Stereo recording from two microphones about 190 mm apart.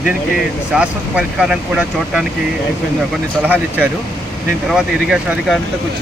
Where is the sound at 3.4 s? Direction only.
10° right (ahead or behind).